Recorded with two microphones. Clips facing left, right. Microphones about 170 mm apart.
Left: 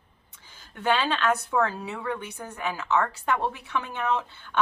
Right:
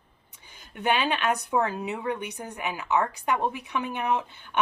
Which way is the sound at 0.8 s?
15° right (ahead or behind).